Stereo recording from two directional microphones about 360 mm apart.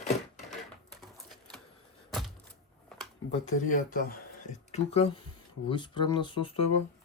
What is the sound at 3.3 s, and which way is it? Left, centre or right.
Speech, left.